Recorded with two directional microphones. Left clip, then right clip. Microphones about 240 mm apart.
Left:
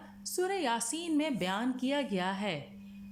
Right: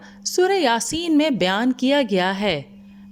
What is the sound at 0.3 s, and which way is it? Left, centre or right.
A woman's voice, right.